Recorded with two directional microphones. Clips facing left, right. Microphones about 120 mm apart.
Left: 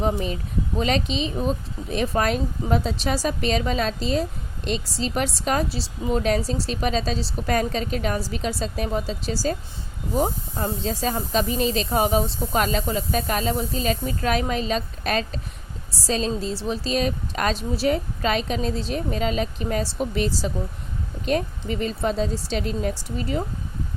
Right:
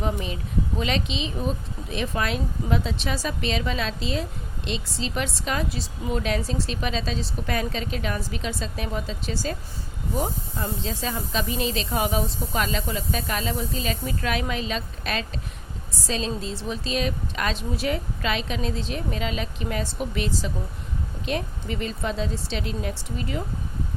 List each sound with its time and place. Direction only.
0.0 s speech: 35° left (ahead or behind)